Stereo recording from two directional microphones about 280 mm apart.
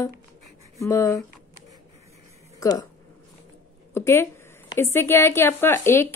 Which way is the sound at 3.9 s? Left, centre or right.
Centre.